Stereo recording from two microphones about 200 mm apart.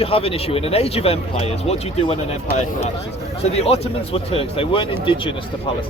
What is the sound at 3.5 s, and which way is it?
A man's voice, 30° left (ahead or behind).